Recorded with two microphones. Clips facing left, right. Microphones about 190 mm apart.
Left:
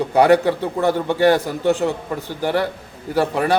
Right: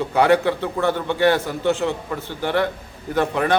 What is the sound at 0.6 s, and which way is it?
Speech, 15° left (ahead or behind).